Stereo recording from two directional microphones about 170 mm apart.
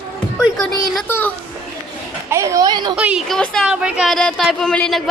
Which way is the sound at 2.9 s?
5° right (ahead or behind).